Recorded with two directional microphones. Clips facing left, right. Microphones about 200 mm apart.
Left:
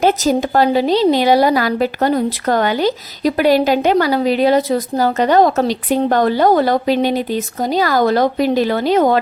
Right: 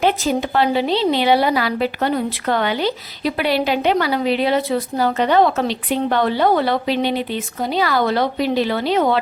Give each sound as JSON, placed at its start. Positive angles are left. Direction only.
{"t": 0.0, "sound": "a woman's voice", "side_deg": 40}